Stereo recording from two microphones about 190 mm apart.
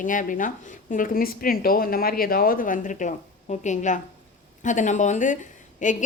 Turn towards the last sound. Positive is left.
turn(degrees=40)  # may be behind; listen again after turning